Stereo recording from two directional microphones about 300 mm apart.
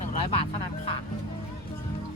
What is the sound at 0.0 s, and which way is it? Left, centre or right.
Music, left.